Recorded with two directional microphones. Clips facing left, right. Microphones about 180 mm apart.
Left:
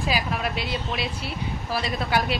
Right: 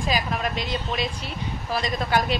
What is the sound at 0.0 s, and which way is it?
Speech, 5° left (ahead or behind).